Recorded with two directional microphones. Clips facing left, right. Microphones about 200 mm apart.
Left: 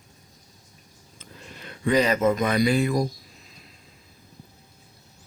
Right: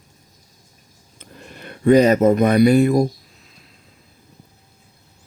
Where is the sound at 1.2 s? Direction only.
50° right (ahead or behind).